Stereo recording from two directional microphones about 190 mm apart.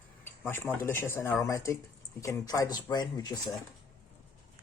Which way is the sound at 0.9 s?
10° left (ahead or behind).